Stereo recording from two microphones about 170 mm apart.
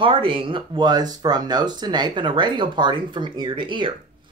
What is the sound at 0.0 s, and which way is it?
Speech, 30° right (ahead or behind).